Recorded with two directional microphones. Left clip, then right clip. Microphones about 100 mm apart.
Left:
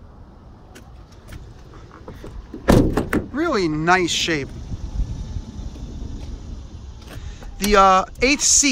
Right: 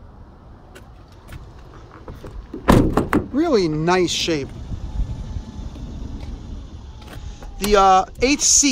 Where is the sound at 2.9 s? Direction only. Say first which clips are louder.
Right 3 dB; 90° right; by 4.2 s 70° right (ahead or behind).